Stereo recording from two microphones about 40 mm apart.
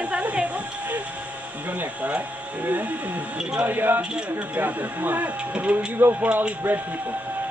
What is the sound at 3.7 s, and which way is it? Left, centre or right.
Speech, right.